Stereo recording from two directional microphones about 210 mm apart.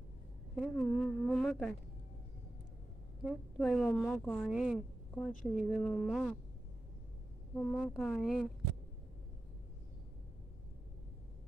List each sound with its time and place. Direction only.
0.6 s speech: centre (ahead or behind)
3.3 s speech: centre (ahead or behind)
7.7 s speech: 5° left (ahead or behind)